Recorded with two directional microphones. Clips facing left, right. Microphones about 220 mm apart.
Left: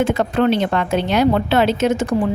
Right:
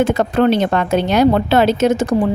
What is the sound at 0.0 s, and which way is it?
A woman's voice, 40° right (ahead or behind).